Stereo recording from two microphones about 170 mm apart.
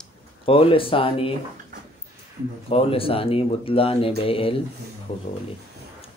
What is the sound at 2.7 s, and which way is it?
Speech, 35° left (ahead or behind).